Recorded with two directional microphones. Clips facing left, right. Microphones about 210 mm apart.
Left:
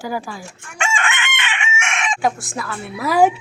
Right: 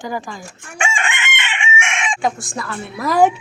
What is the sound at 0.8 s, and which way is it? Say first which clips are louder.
Chicken: even; 15° right (ahead or behind).